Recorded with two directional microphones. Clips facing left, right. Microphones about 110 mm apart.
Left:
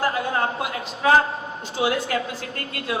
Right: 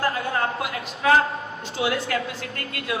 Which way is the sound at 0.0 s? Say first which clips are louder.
Left 1 dB; 30° left (ahead or behind).